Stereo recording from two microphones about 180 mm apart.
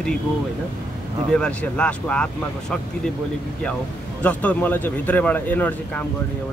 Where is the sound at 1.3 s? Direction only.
5° left (ahead or behind).